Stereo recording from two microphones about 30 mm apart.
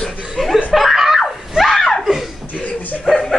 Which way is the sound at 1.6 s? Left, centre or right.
Centre.